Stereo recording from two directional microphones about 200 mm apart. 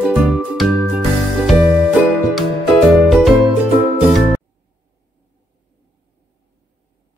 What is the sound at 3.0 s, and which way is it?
Music, centre (ahead or behind).